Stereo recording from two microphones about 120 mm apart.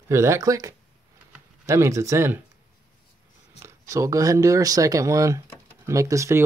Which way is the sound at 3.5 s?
25° right (ahead or behind).